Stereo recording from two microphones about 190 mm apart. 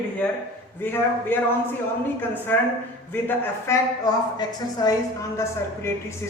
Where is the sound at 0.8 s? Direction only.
10° left (ahead or behind).